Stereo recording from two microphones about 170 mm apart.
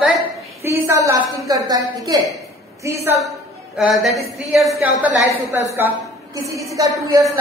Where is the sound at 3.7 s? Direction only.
Centre (ahead or behind).